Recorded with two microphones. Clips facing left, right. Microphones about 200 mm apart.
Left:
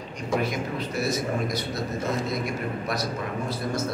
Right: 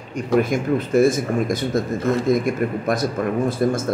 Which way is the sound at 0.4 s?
50° right (ahead or behind).